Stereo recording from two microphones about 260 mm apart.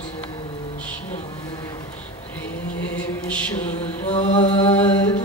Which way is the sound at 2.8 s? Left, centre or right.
Centre.